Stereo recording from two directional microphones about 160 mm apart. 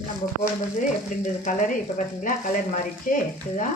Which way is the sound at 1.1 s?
55° left (ahead or behind).